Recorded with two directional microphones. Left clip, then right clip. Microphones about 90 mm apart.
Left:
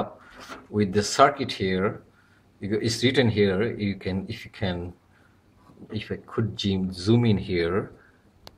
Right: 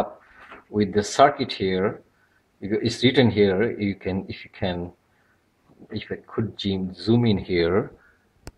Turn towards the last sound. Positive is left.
turn(degrees=-30)  # may be behind; listen again after turning